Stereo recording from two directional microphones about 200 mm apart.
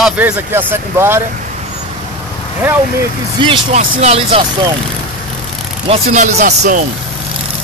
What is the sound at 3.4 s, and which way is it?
Speech, 25° right (ahead or behind).